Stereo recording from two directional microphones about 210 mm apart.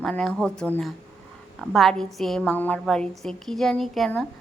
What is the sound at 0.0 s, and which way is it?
A woman's voice, 5° left (ahead or behind).